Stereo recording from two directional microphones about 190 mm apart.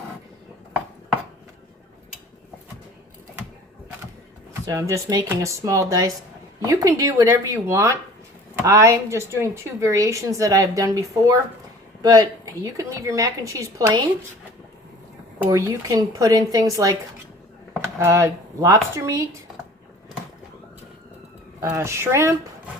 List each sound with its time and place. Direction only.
4.5 s a woman's voice: 15° right (ahead or behind)
15.4 s a woman's voice: 20° right (ahead or behind)
18.0 s a woman's voice: 15° right (ahead or behind)
21.6 s a woman's voice: 15° right (ahead or behind)